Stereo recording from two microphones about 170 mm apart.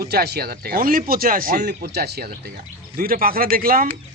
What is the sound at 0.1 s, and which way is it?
Speech, 65° right (ahead or behind).